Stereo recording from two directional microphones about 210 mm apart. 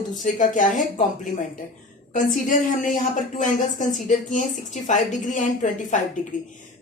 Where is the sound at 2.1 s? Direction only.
40° left (ahead or behind).